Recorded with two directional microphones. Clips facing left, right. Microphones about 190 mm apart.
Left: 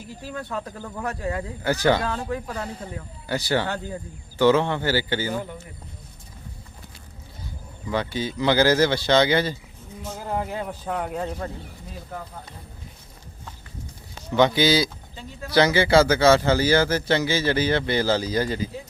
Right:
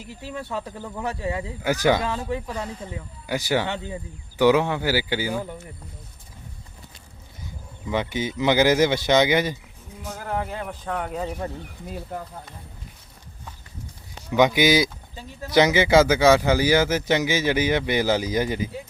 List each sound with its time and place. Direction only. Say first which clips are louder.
0.3 s speech: right 1 dB; 5° right (ahead or behind)
3.2 s speech: even; 10° right (ahead or behind)
7.9 s a man's voice: right 1 dB; 20° right (ahead or behind)
10.2 s speech: left 1 dB; 15° left (ahead or behind)
14.3 s speech: right 1 dB; 15° right (ahead or behind)